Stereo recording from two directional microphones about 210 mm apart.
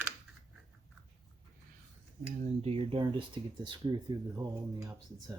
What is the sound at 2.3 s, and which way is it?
Speech, 25° right (ahead or behind).